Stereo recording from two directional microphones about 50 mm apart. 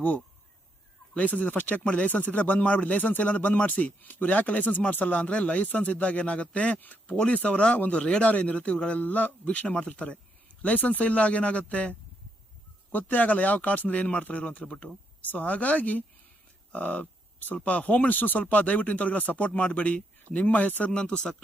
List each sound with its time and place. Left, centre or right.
1.1 s speech: left
6.7 s speech: left
7.2 s speech: left
20.9 s speech: left